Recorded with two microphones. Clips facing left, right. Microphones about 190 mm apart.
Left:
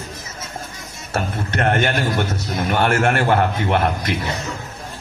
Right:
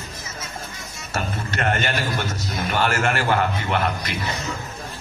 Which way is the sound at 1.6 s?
55° left (ahead or behind).